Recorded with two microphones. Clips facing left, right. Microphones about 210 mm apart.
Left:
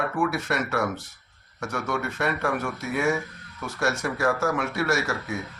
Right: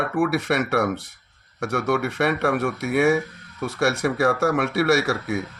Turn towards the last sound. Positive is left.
turn(degrees=-65)  # may be behind; listen again after turning